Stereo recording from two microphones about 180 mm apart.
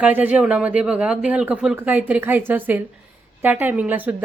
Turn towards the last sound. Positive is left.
turn(degrees=-10)  # may be behind; listen again after turning